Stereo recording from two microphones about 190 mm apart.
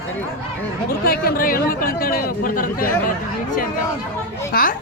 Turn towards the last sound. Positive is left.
turn(degrees=45)  # may be behind; listen again after turning